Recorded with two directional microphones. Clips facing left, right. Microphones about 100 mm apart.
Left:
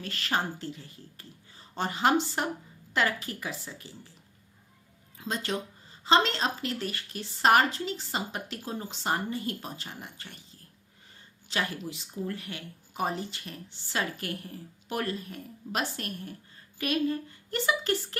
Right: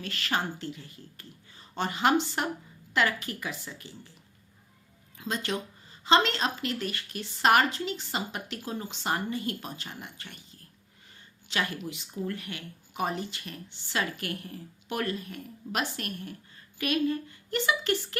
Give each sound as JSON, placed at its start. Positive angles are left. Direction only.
{"t": 0.0, "sound": "a woman's voice", "side_deg": 35}
{"t": 5.1, "sound": "a woman's voice", "side_deg": 35}
{"t": 11.4, "sound": "a woman's voice", "side_deg": 35}